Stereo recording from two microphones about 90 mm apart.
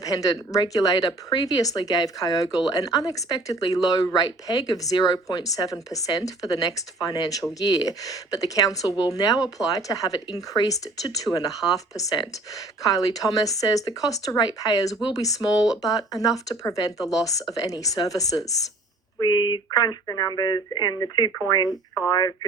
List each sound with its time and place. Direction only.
0.0 s speech: 40° left (ahead or behind)
19.2 s speech: 55° left (ahead or behind)
19.7 s speech: 45° left (ahead or behind)